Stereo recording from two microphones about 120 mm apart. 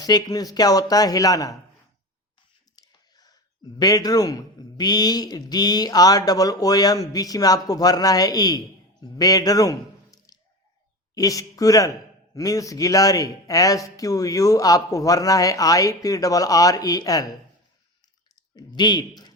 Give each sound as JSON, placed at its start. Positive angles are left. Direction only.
{"t": 0.0, "sound": "speech", "side_deg": 30}
{"t": 2.7, "sound": "whispering", "side_deg": 30}
{"t": 3.8, "sound": "speech", "side_deg": 30}
{"t": 18.3, "sound": "speech", "side_deg": 40}